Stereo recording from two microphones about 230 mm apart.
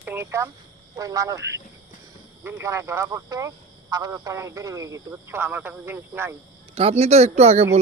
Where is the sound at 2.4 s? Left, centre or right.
Centre.